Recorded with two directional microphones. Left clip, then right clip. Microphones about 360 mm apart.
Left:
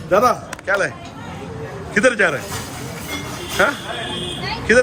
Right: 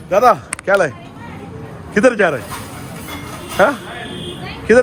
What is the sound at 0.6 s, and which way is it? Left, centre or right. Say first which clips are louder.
Speech: right 5 dB; centre.